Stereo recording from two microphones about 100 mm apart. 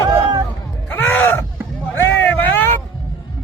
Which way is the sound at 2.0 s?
15° left (ahead or behind).